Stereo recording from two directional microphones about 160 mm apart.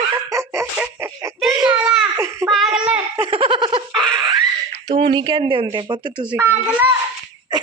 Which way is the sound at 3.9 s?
5° left (ahead or behind).